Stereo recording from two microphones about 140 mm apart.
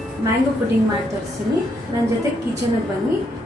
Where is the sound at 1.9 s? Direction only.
25° right (ahead or behind).